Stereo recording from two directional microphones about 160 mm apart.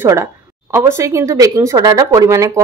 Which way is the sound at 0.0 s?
20° right (ahead or behind).